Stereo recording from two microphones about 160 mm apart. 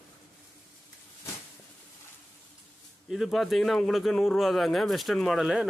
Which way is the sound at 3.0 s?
Centre (ahead or behind).